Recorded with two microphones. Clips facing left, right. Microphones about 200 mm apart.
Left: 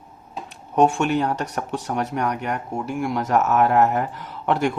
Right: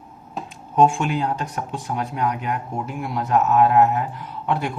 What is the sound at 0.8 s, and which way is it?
Speech, 65° left (ahead or behind).